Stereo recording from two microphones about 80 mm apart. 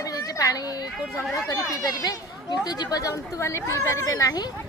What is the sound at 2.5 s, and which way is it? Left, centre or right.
A woman's voice, left.